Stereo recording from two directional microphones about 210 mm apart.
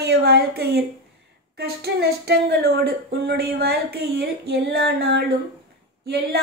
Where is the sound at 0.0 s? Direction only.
50° right (ahead or behind).